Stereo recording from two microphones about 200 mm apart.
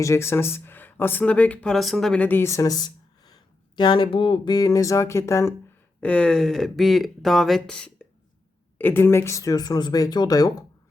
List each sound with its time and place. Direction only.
0.0 s speech: 15° left (ahead or behind)